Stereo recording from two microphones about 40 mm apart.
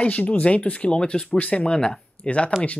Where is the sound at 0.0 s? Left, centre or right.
Left.